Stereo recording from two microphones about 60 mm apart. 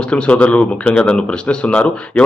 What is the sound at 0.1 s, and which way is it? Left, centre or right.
Speech, centre.